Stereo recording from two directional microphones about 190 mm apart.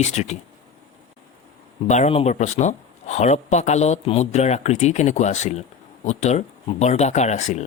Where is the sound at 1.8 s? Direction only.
35° left (ahead or behind).